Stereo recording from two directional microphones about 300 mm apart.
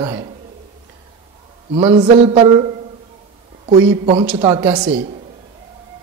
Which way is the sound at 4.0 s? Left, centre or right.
Centre.